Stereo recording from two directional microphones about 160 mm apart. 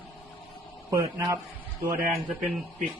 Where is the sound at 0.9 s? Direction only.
20° right (ahead or behind).